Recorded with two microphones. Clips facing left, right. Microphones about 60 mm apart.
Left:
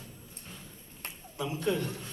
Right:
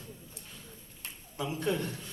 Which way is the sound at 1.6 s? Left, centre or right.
Right.